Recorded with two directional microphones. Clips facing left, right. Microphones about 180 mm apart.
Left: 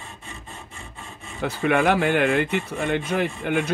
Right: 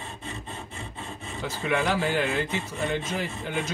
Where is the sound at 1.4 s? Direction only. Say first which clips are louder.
Left 6 dB; 65° left (ahead or behind).